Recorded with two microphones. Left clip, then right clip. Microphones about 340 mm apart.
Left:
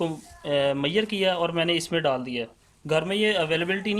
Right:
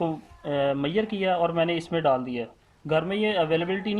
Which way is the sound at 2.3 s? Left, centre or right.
Left.